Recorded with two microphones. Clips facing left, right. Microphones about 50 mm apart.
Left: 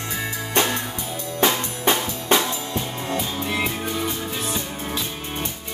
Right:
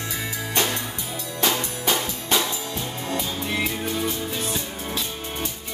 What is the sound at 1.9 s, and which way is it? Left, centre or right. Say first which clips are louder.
Music: left 5 dB; left.